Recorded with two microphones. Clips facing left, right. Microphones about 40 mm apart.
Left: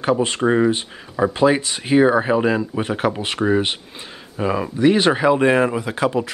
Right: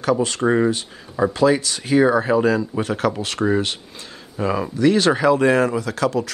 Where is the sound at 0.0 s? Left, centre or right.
Left.